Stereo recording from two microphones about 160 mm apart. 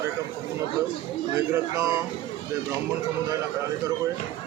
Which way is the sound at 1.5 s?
20° right (ahead or behind).